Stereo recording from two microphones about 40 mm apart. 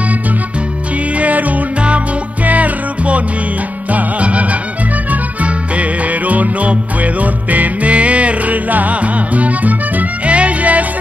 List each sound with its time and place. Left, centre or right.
1.1 s music: right